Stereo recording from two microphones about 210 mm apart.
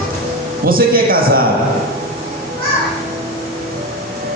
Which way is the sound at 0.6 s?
45° right (ahead or behind).